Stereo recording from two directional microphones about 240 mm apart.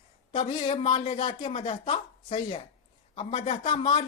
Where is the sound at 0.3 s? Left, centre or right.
Left.